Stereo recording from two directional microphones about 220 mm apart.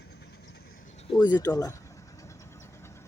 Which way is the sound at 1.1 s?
20° left (ahead or behind).